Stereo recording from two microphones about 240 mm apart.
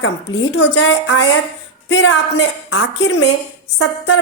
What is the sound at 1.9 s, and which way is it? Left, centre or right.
Speech, left.